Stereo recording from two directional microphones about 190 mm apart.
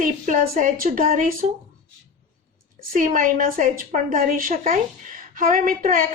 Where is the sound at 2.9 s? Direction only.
45° right (ahead or behind).